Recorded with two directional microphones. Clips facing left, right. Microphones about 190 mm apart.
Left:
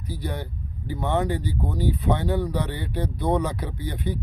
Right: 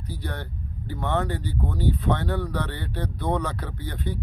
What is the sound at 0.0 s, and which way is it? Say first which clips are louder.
Speech: left 3 dB; 10° left (ahead or behind).